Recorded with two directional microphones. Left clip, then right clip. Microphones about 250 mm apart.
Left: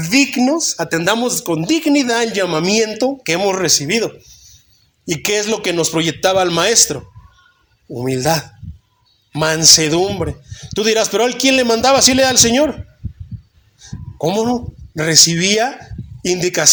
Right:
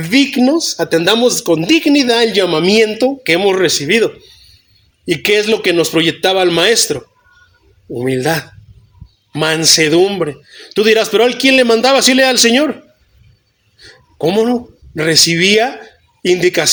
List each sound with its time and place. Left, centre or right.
0.0 s speech: left
14.2 s speech: left